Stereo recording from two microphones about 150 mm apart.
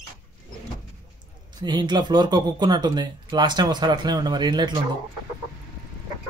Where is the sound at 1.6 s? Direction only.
30° right (ahead or behind).